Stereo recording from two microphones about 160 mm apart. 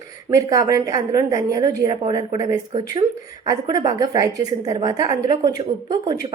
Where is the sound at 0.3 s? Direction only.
20° right (ahead or behind).